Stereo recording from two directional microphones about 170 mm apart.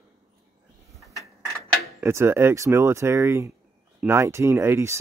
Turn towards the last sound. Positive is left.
turn(degrees=-15)  # may be behind; listen again after turning